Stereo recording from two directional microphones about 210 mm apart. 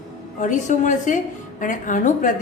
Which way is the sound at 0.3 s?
35° left (ahead or behind).